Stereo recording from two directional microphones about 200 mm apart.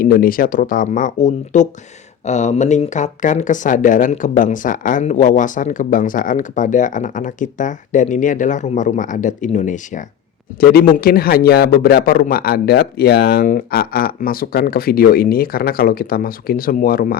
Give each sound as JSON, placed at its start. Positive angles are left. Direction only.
{"t": 0.0, "sound": "a man's voice", "side_deg": 45}
{"t": 10.6, "sound": "a man's voice", "side_deg": 50}